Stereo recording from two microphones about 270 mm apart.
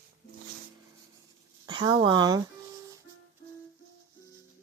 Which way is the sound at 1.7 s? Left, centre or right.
Centre.